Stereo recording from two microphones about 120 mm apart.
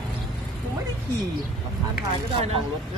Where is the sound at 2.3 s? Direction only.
55° right (ahead or behind).